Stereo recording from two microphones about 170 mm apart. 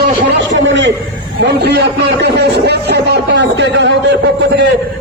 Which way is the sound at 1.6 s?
75° right (ahead or behind).